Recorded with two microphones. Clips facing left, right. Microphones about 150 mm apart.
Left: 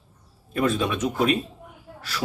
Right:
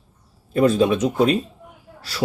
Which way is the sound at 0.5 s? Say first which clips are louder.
Right 7 dB; 35° right (ahead or behind).